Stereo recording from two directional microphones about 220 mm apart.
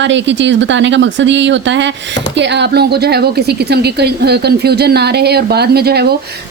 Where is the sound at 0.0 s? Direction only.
55° right (ahead or behind).